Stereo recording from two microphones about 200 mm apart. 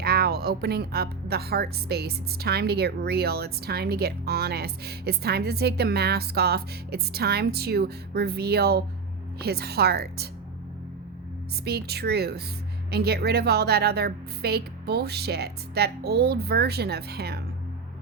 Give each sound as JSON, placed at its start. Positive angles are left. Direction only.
{"t": 0.0, "sound": "a woman's voice", "side_deg": -50}
{"t": 11.6, "sound": "a woman's voice", "side_deg": -55}